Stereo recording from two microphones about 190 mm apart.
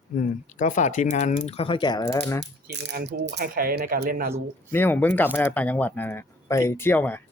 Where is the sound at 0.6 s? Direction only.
40° left (ahead or behind); by 2.5 s 15° left (ahead or behind).